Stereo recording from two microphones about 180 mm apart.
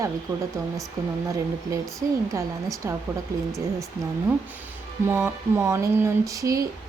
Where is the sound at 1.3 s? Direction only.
15° right (ahead or behind).